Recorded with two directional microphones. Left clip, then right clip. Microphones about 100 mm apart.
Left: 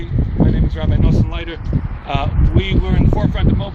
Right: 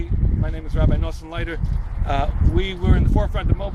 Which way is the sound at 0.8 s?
40° right (ahead or behind).